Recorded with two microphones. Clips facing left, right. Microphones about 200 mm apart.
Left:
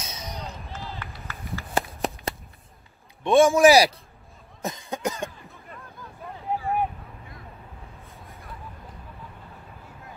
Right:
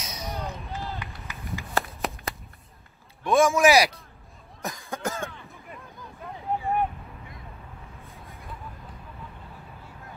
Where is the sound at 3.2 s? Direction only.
30° left (ahead or behind).